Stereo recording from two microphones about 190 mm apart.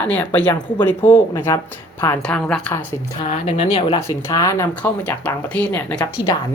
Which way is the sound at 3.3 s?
35° left (ahead or behind).